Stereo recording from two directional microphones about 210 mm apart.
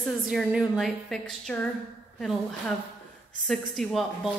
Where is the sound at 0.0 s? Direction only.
Centre (ahead or behind).